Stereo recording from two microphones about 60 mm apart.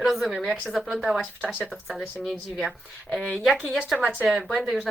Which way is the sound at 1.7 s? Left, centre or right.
Centre.